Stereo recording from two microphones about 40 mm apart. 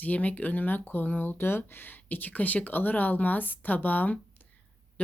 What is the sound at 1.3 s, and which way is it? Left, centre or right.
Speech, left.